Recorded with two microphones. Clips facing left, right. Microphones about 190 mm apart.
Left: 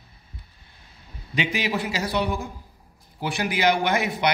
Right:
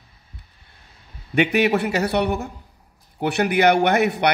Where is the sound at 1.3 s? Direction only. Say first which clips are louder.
Right 8 dB; 65° right (ahead or behind).